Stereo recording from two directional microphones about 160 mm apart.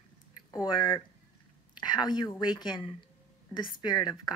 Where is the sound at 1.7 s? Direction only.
25° left (ahead or behind).